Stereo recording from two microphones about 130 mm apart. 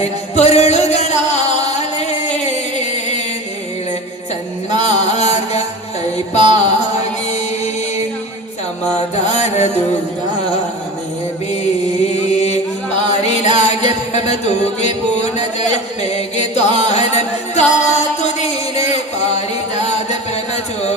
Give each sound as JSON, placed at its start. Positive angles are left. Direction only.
{"t": 0.0, "sound": "music", "side_deg": 55}
{"t": 4.7, "sound": "music", "side_deg": 60}
{"t": 9.0, "sound": "music", "side_deg": 60}
{"t": 12.2, "sound": "chant", "side_deg": 55}
{"t": 13.1, "sound": "music", "side_deg": 60}
{"t": 15.5, "sound": "chant", "side_deg": 60}
{"t": 16.9, "sound": "music", "side_deg": 60}
{"t": 19.7, "sound": "music", "side_deg": 60}